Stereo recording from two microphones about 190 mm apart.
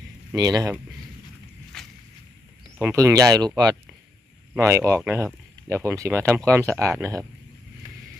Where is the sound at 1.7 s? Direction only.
5° left (ahead or behind).